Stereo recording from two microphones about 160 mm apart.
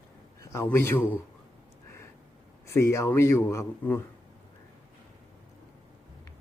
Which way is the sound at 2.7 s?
15° left (ahead or behind).